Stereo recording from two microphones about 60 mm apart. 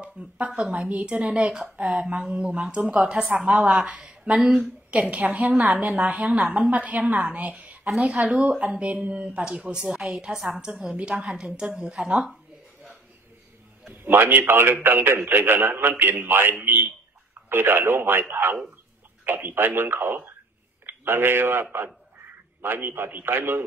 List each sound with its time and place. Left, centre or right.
0.0 s a woman's voice: centre
10.6 s a woman's voice: centre
11.3 s a woman's voice: centre
14.0 s a man's voice: right